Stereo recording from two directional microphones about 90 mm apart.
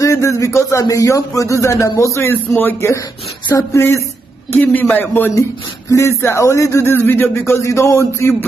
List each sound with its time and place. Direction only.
0.0 s a man's voice: 35° left (ahead or behind)
4.5 s a man's voice: 20° left (ahead or behind)